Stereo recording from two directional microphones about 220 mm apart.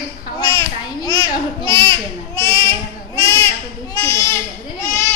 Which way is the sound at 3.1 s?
15° left (ahead or behind).